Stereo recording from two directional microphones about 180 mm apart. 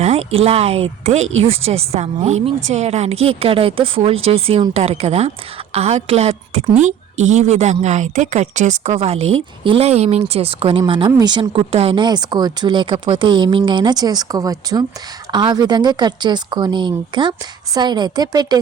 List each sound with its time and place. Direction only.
0.0 s a woman's voice: 35° right (ahead or behind)